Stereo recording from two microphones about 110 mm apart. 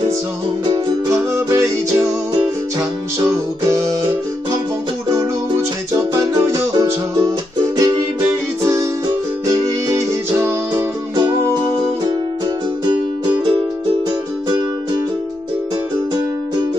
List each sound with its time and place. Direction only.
1.0 s music: 25° right (ahead or behind)
3.3 s music: 30° right (ahead or behind)
5.9 s music: 30° right (ahead or behind)
9.8 s music: 25° right (ahead or behind)